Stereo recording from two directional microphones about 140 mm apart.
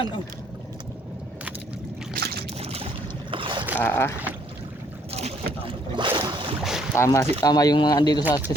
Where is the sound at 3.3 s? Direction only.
35° right (ahead or behind).